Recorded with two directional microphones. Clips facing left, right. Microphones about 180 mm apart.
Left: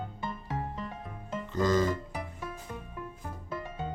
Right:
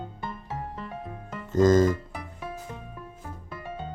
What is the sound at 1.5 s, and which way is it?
Music, 45° right (ahead or behind).